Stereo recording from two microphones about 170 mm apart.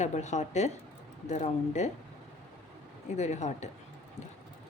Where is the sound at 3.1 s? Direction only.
40° left (ahead or behind).